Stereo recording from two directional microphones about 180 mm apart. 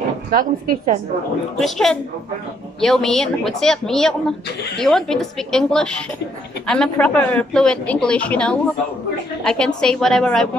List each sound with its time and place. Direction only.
0.3 s a woman's voice: 50° right (ahead or behind)
1.6 s speech: centre (ahead or behind)